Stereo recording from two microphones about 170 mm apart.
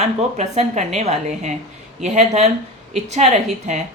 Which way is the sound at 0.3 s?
40° right (ahead or behind).